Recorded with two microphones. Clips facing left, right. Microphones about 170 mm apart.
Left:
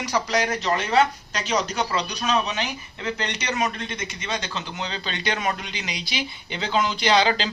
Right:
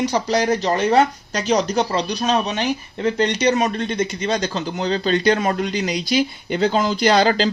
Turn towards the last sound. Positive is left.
turn(degrees=-45)  # may be behind; listen again after turning